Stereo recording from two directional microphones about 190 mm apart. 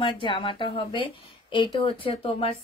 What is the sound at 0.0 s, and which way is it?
A woman's voice, 25° left (ahead or behind).